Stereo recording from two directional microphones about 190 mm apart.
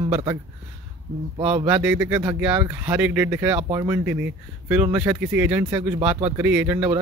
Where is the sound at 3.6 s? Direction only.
25° right (ahead or behind).